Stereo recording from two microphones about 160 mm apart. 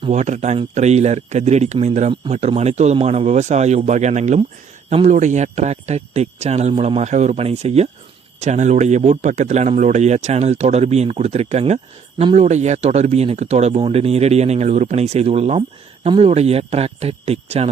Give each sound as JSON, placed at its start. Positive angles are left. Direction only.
{"t": 0.1, "sound": "a man's voice", "side_deg": -45}